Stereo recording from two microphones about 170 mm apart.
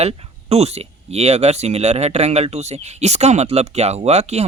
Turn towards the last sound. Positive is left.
turn(degrees=-40)  # may be behind; listen again after turning